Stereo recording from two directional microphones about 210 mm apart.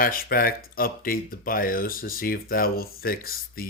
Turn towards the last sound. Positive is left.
turn(degrees=45)  # may be behind; listen again after turning